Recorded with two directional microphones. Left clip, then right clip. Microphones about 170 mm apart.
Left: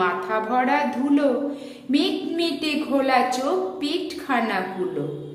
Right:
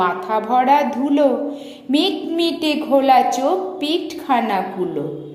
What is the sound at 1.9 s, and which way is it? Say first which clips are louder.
A woman's voice: right 4 dB; 20° right (ahead or behind).